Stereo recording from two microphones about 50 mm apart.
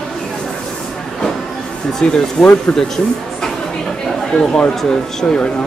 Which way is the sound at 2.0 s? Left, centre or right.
Centre.